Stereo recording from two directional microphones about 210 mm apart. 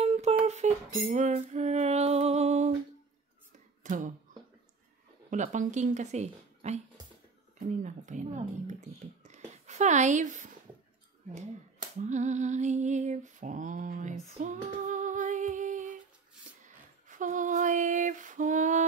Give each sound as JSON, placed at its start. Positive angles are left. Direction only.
{"t": 0.0, "sound": "humming", "side_deg": -30}
{"t": 0.5, "sound": "a sound", "side_deg": -35}
{"t": 3.8, "sound": "speech", "side_deg": -35}
{"t": 5.3, "sound": "speech", "side_deg": -35}
{"t": 12.0, "sound": "speech", "side_deg": -35}
{"t": 14.4, "sound": "female singing", "side_deg": -35}